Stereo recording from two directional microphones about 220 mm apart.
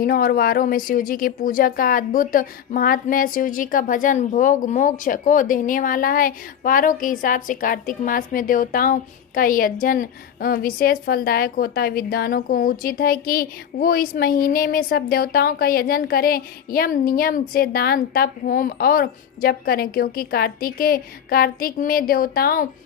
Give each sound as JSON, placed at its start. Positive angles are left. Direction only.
{"t": 0.0, "sound": "speech", "side_deg": 40}